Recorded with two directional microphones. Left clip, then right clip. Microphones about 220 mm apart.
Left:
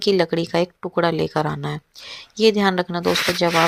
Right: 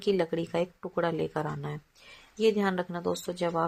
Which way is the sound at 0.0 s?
35° left (ahead or behind).